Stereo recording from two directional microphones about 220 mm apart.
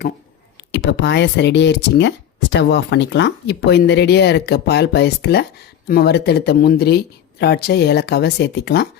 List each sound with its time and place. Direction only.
0.7 s speech: 55° left (ahead or behind)